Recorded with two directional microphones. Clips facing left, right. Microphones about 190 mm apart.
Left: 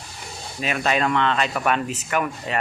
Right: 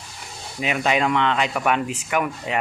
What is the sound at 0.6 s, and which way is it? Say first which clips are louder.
A man's voice: right 1 dB; 15° right (ahead or behind).